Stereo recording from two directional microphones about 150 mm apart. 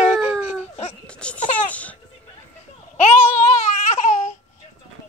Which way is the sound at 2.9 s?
45° left (ahead or behind).